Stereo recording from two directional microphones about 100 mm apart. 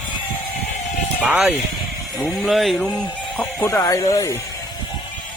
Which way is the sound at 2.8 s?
10° left (ahead or behind).